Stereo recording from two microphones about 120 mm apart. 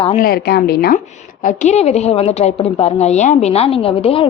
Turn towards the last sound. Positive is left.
turn(degrees=50)  # may be behind; listen again after turning